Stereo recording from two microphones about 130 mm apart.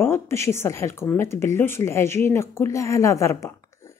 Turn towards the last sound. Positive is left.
turn(degrees=20)  # may be behind; listen again after turning